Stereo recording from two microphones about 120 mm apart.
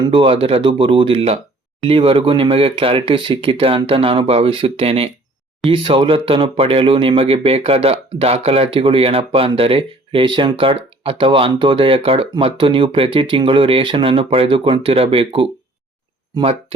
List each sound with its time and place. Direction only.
0.0 s speech: 45° right (ahead or behind)